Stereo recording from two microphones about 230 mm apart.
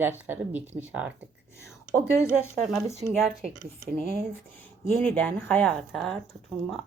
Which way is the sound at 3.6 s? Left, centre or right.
Right.